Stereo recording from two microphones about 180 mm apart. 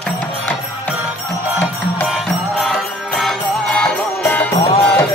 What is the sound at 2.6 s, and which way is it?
Music, centre (ahead or behind).